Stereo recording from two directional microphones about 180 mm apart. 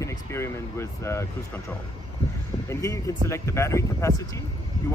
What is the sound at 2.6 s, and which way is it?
Speech, 15° left (ahead or behind).